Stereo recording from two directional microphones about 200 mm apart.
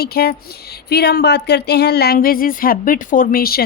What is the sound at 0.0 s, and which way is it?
A woman's voice, 50° left (ahead or behind).